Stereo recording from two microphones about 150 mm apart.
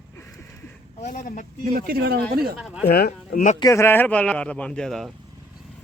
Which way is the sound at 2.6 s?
Centre (ahead or behind).